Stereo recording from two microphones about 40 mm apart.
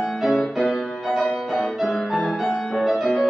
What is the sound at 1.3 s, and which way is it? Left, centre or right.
Music, left.